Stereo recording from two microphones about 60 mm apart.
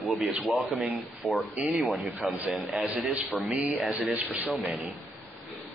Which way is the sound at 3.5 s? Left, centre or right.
Right.